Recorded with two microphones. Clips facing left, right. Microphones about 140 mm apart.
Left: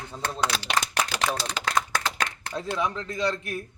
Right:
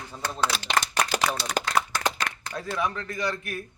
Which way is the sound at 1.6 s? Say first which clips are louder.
Right 2 dB; 45° right (ahead or behind).